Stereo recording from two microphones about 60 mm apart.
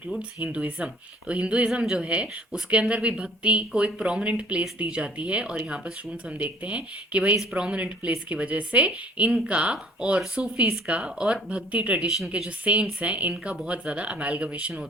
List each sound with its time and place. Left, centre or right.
0.2 s a woman's voice: right